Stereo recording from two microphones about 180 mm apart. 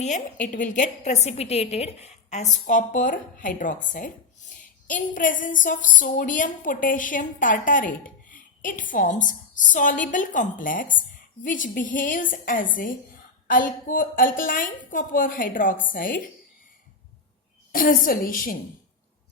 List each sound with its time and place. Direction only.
0.0 s a woman's voice: 45° left (ahead or behind)
17.7 s a woman's voice: 50° left (ahead or behind)